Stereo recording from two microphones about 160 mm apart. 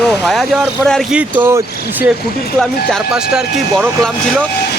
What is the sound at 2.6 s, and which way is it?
Speech, centre (ahead or behind).